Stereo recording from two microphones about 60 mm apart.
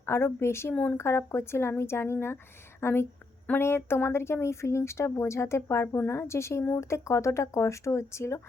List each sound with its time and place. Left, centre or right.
0.0 s a woman's voice: left
0.7 s speech: left
0.9 s a woman's voice: left